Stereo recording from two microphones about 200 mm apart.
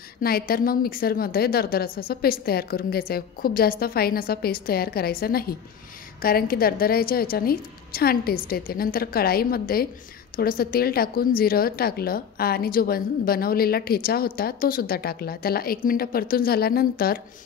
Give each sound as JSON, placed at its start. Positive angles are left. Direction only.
{"t": 0.2, "sound": "a woman's voice", "side_deg": 50}